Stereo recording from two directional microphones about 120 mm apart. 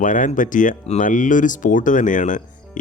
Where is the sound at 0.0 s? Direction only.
90° left.